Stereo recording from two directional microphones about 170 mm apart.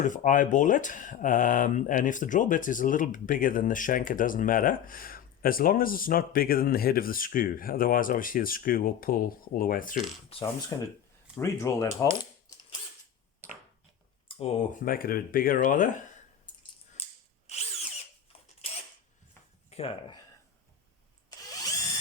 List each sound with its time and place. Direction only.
0.0 s speech: 50° left (ahead or behind)
10.7 s speech: 20° left (ahead or behind)
12.5 s mechanisms: 25° left (ahead or behind)
14.3 s speech: 40° left (ahead or behind)
17.0 s a sound: 35° left (ahead or behind)
19.7 s speech: 35° left (ahead or behind)